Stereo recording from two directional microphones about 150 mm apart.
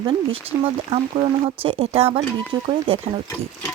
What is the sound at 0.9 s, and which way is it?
Speech, 40° right (ahead or behind).